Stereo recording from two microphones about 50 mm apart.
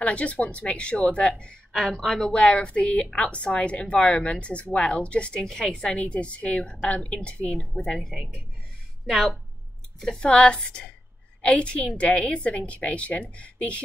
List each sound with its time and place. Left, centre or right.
0.0 s a woman's voice: left
1.7 s speech: centre
2.2 s a woman's voice: left
7.4 s speech: centre
9.0 s a woman's voice: centre
10.2 s a woman's voice: centre